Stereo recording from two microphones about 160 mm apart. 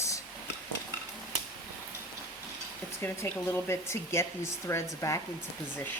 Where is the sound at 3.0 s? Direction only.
15° left (ahead or behind).